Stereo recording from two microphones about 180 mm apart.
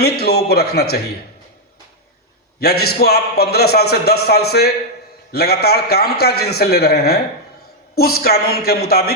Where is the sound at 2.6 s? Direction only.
60° left (ahead or behind).